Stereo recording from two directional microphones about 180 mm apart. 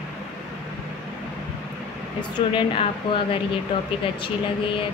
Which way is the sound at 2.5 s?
30° left (ahead or behind).